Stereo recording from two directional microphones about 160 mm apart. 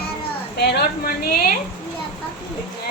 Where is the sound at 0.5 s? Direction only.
90° left; by 1.5 s 65° left (ahead or behind).